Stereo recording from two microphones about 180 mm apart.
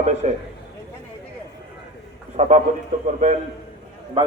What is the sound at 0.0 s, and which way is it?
Speech, 40° right (ahead or behind).